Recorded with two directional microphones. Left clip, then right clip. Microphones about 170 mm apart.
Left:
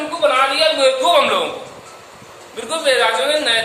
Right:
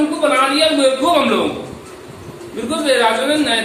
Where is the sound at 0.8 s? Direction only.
40° left (ahead or behind).